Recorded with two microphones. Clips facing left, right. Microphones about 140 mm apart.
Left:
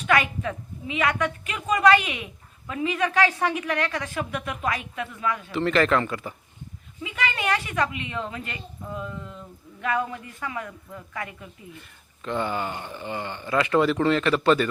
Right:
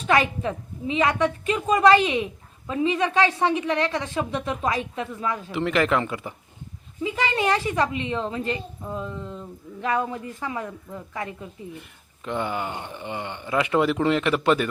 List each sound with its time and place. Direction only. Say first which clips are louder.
0.1 s a woman's voice: right 2 dB; 30° right (ahead or behind)
5.5 s speech: left 1 dB; 15° right (ahead or behind)
7.0 s a woman's voice: right 4 dB; 30° right (ahead or behind)
12.2 s speech: even; 15° right (ahead or behind)